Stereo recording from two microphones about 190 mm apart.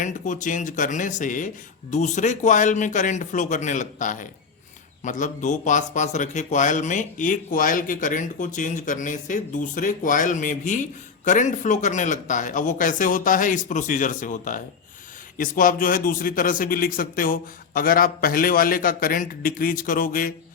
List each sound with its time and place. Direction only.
0.0 s a man's voice: 40° left (ahead or behind)